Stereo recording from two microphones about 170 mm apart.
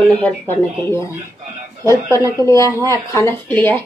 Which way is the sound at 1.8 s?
20° right (ahead or behind).